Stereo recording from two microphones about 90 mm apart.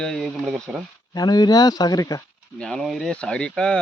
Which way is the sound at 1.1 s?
50° left (ahead or behind).